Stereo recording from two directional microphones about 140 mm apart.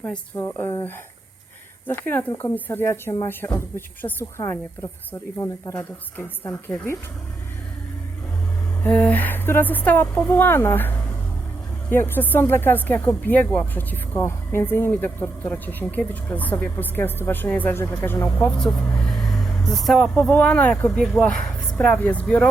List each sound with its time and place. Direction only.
0.0 s speech: 10° left (ahead or behind)
8.8 s speech: 5° left (ahead or behind)